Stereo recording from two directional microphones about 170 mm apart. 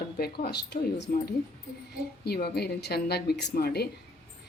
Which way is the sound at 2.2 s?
70° left (ahead or behind).